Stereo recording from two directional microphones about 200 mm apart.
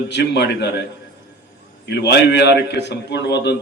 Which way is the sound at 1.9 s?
60° left (ahead or behind).